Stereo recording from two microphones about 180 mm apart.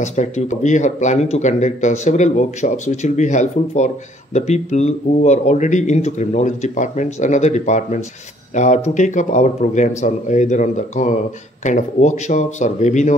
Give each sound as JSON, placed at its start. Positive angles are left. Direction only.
{"t": 0.0, "sound": "speech", "side_deg": 40}